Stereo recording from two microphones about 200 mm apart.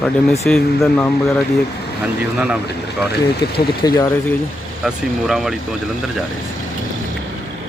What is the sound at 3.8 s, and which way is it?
Speech, 20° left (ahead or behind).